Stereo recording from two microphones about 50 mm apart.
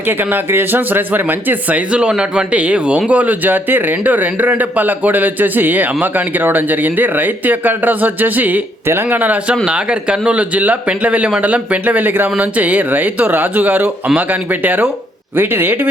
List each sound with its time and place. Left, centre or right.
0.0 s speech: right
1.7 s speech: right
9.6 s speech: right